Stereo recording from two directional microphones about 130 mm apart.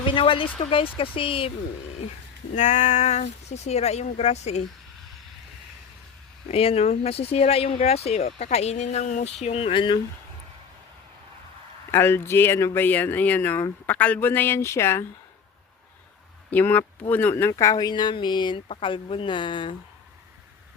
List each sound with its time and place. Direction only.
0.1 s speech: 40° left (ahead or behind)
2.6 s speech: 65° left (ahead or behind)
6.5 s speech: 50° left (ahead or behind)
11.9 s speech: 20° left (ahead or behind)
16.5 s speech: 15° left (ahead or behind)
17.5 s speech: 30° left (ahead or behind)